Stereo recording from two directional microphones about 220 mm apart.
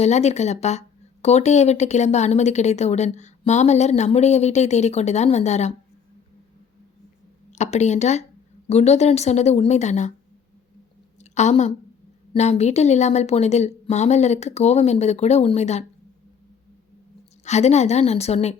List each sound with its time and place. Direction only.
0.0 s speech: 30° left (ahead or behind)
7.5 s speech: 30° left (ahead or behind)
11.2 s a woman's voice: 30° left (ahead or behind)
17.4 s a woman's voice: 30° left (ahead or behind)